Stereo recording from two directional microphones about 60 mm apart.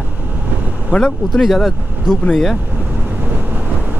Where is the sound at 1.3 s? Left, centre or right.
Centre.